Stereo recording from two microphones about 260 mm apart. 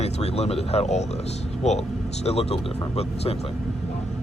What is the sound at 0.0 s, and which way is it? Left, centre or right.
Speech, left.